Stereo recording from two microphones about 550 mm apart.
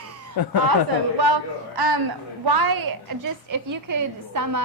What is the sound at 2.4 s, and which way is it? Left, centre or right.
A woman's voice, right.